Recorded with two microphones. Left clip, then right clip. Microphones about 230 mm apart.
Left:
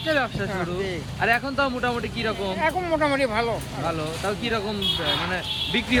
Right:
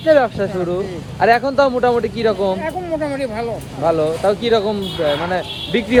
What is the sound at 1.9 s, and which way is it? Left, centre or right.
Speech, centre.